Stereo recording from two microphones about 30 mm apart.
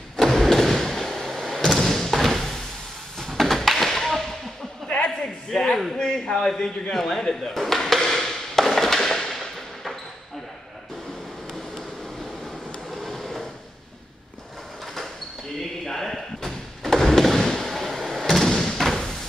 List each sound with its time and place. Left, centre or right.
0.2 s vehicle: centre
1.7 s thump: centre
2.1 s door: centre
3.3 s a sound: centre
4.8 s a sound: left
5.5 s a man's voice: centre
5.9 s a man's voice: left
6.5 s a man's voice: centre
8.0 s a sound: centre
9.3 s fireworks: centre
12.9 s train: centre
15.8 s slam: centre
18.8 s a sound: centre